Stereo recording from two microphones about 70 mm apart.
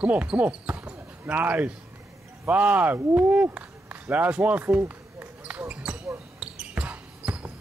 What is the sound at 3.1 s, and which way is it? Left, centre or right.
Run, right.